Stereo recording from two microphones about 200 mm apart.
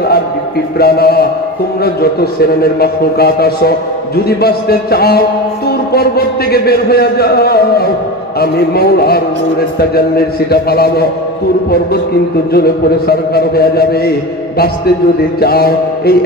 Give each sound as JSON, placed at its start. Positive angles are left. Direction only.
{"t": 0.7, "sound": "a man's voice", "side_deg": 50}
{"t": 12.5, "sound": "a man's voice", "side_deg": 50}
{"t": 15.4, "sound": "a man's voice", "side_deg": 50}